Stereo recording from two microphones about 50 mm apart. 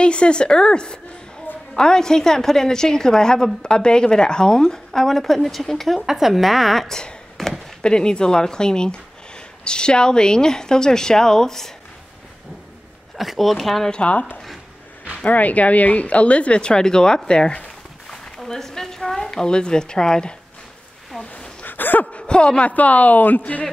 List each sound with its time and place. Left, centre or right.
0.0 s a woman's voice: left; by 5.9 s centre
5.9 s a woman's voice: centre
7.3 s chop: centre
7.8 s a woman's voice: centre
13.2 s a woman's voice: centre
13.8 s a woman's voice: centre
14.1 s speech: left; by 17.6 s centre
18.1 s a woman's voice: centre
21.2 s a sound: left
21.6 s a sound: left
22.1 s speech: centre